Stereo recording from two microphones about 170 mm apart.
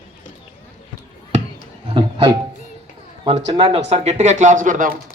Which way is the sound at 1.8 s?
30° right (ahead or behind).